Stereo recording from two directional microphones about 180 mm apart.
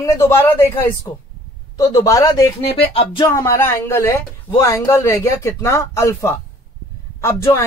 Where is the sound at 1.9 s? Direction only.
20° left (ahead or behind).